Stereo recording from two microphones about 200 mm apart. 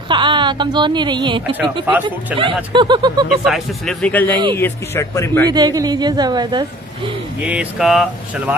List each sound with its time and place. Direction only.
0.1 s speech: 25° right (ahead or behind)
3.4 s speech: centre (ahead or behind)
5.5 s speech: 20° right (ahead or behind)
7.4 s speech: 5° right (ahead or behind)